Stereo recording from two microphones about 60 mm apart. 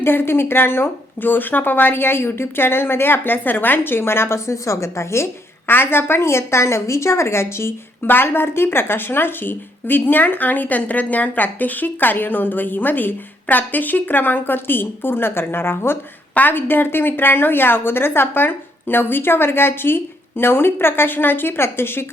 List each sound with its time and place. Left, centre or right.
0.0 s a woman's voice: left
5.6 s a woman's voice: left
16.3 s a woman's voice: left